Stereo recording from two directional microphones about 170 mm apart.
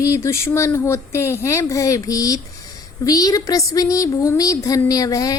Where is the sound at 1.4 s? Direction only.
20° left (ahead or behind).